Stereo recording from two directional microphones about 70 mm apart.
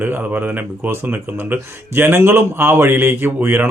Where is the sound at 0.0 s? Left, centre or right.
Right.